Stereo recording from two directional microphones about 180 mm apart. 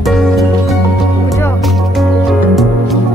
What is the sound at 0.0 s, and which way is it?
Music, centre (ahead or behind).